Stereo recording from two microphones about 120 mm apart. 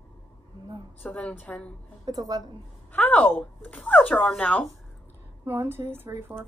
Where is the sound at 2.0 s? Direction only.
30° right (ahead or behind).